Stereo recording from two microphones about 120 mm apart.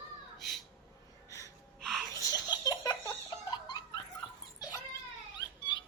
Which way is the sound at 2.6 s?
30° left (ahead or behind).